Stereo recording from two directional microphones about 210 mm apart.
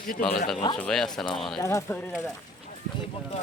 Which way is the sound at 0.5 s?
20° left (ahead or behind).